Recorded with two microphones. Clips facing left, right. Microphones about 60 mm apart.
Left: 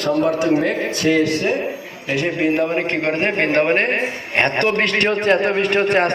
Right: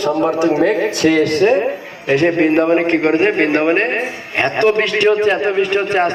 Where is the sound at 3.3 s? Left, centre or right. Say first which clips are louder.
Right 3 dB; centre.